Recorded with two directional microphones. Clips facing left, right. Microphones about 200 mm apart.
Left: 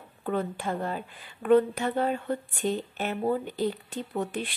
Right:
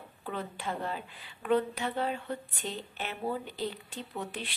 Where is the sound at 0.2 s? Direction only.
50° left (ahead or behind).